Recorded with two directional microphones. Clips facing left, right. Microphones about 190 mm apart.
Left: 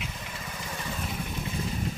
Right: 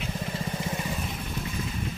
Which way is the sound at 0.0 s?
35° right (ahead or behind).